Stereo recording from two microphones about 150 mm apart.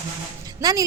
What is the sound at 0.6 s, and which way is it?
Speech, 25° right (ahead or behind).